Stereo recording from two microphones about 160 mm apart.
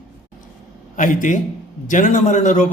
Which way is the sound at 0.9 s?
55° left (ahead or behind).